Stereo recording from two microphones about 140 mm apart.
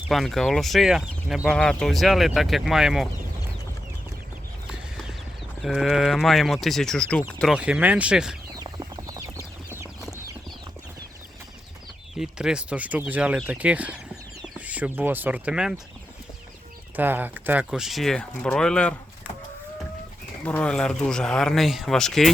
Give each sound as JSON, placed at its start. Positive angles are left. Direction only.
{"t": 0.1, "sound": "speech", "side_deg": 0}
{"t": 5.6, "sound": "speech", "side_deg": 0}
{"t": 8.5, "sound": "chicken", "side_deg": -25}
{"t": 12.1, "sound": "speech", "side_deg": -5}
{"t": 17.0, "sound": "speech", "side_deg": -15}
{"t": 20.4, "sound": "speech", "side_deg": 10}